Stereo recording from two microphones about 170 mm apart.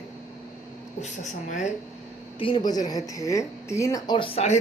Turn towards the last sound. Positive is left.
turn(degrees=25)  # may be behind; listen again after turning